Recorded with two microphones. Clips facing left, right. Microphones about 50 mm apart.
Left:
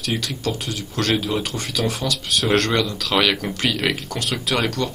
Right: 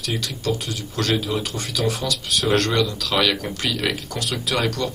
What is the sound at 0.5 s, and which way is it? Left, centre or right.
Speech, left.